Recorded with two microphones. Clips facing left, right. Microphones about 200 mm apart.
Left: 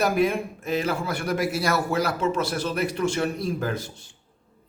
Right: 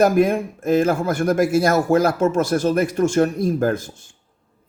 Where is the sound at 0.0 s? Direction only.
50° right (ahead or behind).